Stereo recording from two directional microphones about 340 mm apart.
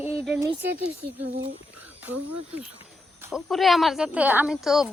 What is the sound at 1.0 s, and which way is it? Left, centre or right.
Speech, right.